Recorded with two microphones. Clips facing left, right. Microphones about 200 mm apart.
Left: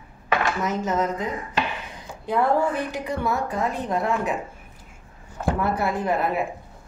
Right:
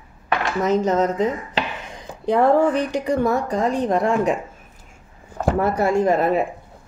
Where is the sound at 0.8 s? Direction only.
40° right (ahead or behind).